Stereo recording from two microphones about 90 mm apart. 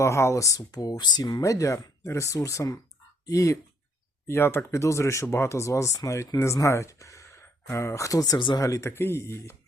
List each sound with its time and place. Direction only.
0.0 s speech: 30° left (ahead or behind)
8.9 s speech: 25° left (ahead or behind)